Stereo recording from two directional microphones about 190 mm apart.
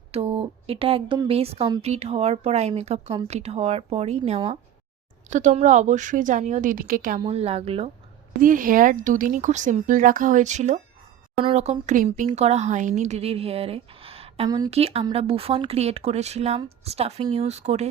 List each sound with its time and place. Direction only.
0.1 s speech: 30° right (ahead or behind)
5.3 s speech: 40° right (ahead or behind)
7.2 s speech: 30° right (ahead or behind)
8.4 s speech: 45° right (ahead or behind); by 14.7 s 20° right (ahead or behind)
14.7 s speech: 30° right (ahead or behind)